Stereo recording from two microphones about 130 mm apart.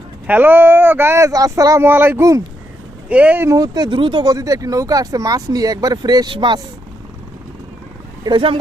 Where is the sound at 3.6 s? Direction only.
30° right (ahead or behind).